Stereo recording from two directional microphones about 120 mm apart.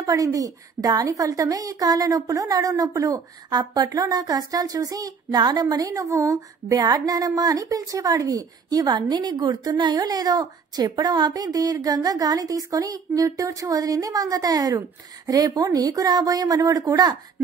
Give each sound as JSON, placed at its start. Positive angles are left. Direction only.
{"t": 0.0, "sound": "a woman's voice", "side_deg": -30}